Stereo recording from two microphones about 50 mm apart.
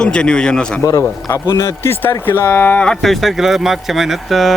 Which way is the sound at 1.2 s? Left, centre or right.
Left.